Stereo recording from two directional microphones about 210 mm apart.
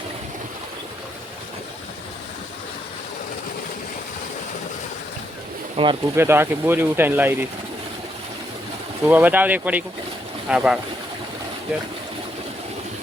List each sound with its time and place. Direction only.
5.7 s speech: 25° right (ahead or behind)
6.1 s speech: 10° right (ahead or behind)
9.0 s speech: 10° right (ahead or behind)